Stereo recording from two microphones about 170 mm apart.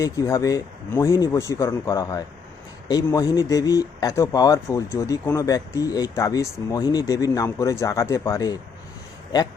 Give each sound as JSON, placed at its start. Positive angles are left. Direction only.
{"t": 0.0, "sound": "speech", "side_deg": 20}